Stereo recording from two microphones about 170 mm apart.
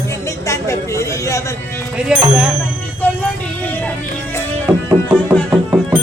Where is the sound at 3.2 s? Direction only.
10° left (ahead or behind).